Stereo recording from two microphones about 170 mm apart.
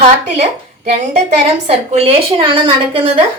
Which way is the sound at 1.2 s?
35° right (ahead or behind).